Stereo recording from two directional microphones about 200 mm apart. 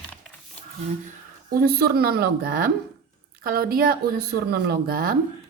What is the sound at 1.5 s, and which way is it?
Speech, 50° right (ahead or behind).